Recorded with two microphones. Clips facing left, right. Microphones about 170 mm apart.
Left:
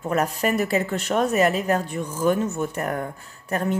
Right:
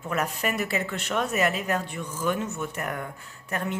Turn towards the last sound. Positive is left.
turn(degrees=35)  # may be behind; listen again after turning